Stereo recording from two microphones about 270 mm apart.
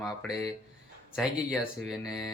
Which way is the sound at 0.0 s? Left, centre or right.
Centre.